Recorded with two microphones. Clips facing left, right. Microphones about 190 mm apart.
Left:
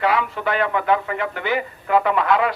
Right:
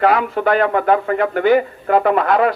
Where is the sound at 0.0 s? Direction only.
45° right (ahead or behind).